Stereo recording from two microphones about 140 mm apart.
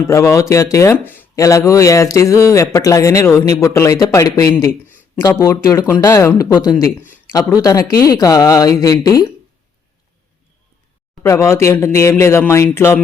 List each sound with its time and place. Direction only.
0.1 s speech: 20° left (ahead or behind)
11.2 s speech: 20° left (ahead or behind)